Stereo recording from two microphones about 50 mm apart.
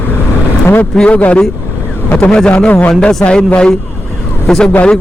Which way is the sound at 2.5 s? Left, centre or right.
Left.